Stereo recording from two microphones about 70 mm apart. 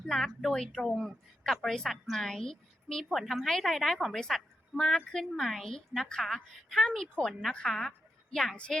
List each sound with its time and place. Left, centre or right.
0.0 s a woman's voice: centre
8.5 s speech: centre